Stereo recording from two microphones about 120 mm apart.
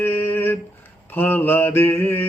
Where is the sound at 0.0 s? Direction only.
20° left (ahead or behind).